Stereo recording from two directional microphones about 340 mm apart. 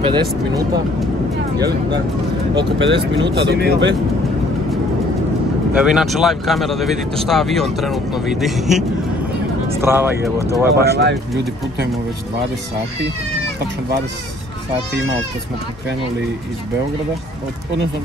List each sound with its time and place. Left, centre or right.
0.0 s speech: centre
2.5 s speech: right
5.8 s speech: centre
10.9 s speech: right